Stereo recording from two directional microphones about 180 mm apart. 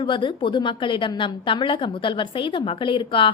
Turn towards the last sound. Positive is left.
turn(degrees=30)  # may be behind; listen again after turning